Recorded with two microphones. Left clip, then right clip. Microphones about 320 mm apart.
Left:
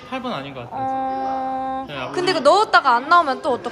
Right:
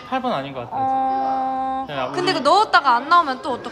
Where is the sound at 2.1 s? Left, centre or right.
Centre.